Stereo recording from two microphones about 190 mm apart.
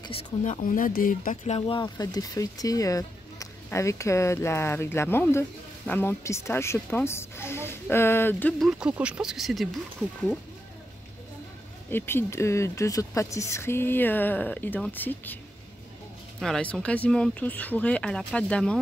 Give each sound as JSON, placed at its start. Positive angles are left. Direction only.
{"t": 0.0, "sound": "speech", "side_deg": 30}
{"t": 1.4, "sound": "speech", "side_deg": 30}
{"t": 8.6, "sound": "speech", "side_deg": -5}
{"t": 11.9, "sound": "speech", "side_deg": 10}
{"t": 16.3, "sound": "speech", "side_deg": 5}